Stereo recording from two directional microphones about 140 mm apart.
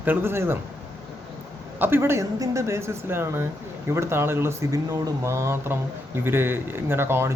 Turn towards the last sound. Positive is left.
turn(degrees=-15)  # may be behind; listen again after turning